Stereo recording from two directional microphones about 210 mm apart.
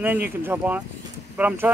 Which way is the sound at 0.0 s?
10° right (ahead or behind).